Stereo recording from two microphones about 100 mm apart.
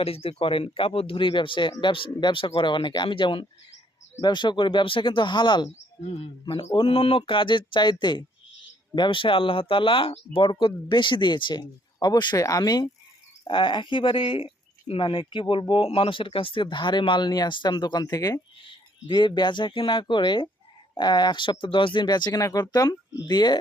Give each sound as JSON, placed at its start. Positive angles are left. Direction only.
{"t": 0.0, "sound": "speech", "side_deg": 75}
{"t": 6.8, "sound": "speech", "side_deg": 70}
{"t": 10.5, "sound": "speech", "side_deg": 50}
{"t": 12.4, "sound": "speech", "side_deg": 35}
{"t": 13.5, "sound": "speech", "side_deg": 55}
{"t": 18.6, "sound": "speech", "side_deg": 55}